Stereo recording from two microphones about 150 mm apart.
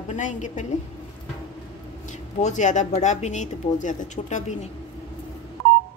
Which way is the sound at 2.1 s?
55° left (ahead or behind).